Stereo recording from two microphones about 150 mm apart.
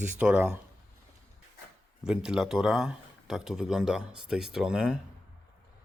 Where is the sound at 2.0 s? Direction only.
5° right (ahead or behind).